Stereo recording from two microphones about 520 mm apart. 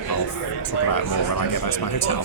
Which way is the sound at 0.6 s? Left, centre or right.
Left.